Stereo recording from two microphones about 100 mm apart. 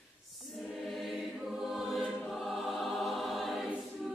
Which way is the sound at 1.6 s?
Centre (ahead or behind).